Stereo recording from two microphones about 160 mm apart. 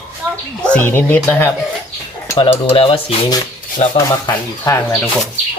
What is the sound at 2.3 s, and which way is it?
Cutlery, 35° left (ahead or behind).